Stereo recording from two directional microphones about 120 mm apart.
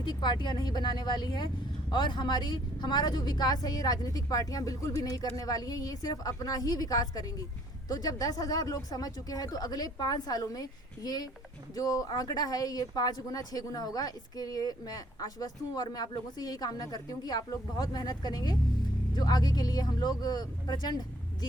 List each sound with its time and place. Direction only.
0.0 s speech: 40° left (ahead or behind)